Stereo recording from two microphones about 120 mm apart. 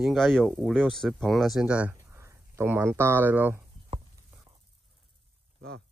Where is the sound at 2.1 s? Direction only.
20° right (ahead or behind).